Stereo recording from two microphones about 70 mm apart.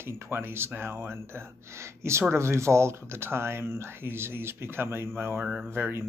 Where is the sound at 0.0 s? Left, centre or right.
Right.